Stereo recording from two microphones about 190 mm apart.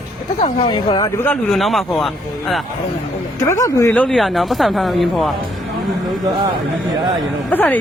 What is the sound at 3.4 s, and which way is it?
Speech, 15° left (ahead or behind).